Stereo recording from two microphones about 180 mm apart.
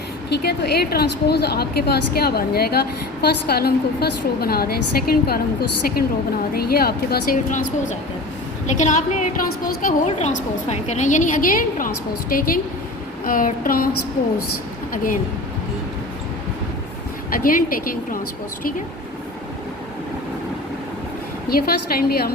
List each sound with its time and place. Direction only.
0.3 s a woman's voice: 65° left (ahead or behind)
6.5 s a woman's voice: 60° left (ahead or behind)
17.3 s a woman's voice: 50° left (ahead or behind)
21.5 s a woman's voice: 55° left (ahead or behind)